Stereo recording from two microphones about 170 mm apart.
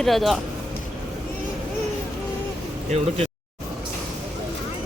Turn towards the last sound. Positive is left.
turn(degrees=-40)  # may be behind; listen again after turning